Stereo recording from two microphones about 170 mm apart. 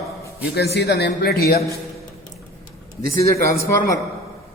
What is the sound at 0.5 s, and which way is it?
A man's voice, 80° left.